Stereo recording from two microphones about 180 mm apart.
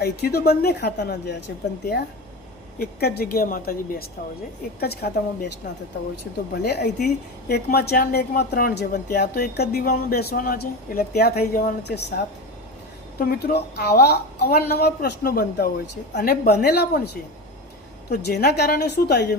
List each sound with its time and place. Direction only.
0.0 s a woman's voice: 60° left (ahead or behind)
2.7 s a woman's voice: 60° left (ahead or behind)
6.5 s a woman's voice: 65° left (ahead or behind)
18.1 s a woman's voice: 65° left (ahead or behind)